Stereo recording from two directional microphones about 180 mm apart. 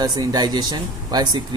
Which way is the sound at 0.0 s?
20° right (ahead or behind).